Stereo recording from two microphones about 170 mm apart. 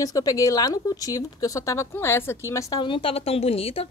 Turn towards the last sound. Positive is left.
turn(degrees=35)  # may be behind; listen again after turning